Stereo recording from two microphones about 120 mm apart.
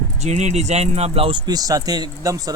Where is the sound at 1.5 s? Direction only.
30° right (ahead or behind).